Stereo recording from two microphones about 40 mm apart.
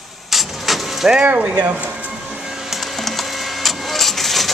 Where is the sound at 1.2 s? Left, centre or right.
Right.